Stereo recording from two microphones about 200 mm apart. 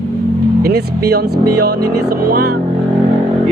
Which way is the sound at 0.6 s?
50° right (ahead or behind).